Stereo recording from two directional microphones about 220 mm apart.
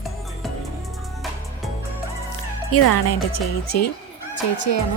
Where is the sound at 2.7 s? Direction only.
90° left.